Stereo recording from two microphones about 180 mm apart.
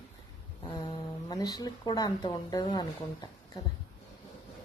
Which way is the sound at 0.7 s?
20° left (ahead or behind).